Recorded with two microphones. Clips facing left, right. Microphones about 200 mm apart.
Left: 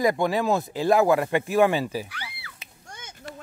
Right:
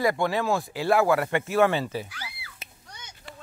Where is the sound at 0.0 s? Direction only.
15° left (ahead or behind).